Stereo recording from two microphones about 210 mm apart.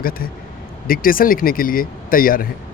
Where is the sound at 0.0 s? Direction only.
45° left (ahead or behind).